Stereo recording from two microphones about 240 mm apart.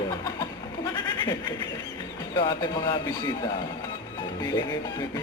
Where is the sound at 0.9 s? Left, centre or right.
Centre.